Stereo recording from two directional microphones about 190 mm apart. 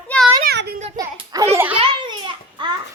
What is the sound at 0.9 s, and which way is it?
Hands, 20° right (ahead or behind).